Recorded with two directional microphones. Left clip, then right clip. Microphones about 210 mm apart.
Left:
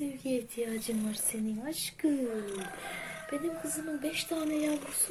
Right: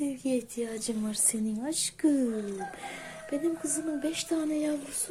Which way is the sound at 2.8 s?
15° right (ahead or behind).